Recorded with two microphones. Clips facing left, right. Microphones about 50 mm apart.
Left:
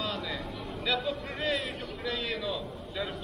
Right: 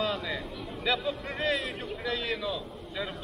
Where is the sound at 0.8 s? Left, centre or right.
Centre.